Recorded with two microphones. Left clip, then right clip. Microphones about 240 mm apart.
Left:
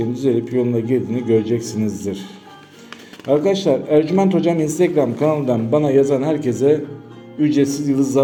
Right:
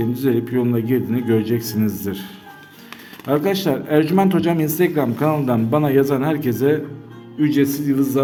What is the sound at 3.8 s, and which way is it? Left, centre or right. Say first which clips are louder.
A man's voice: right 2 dB; centre.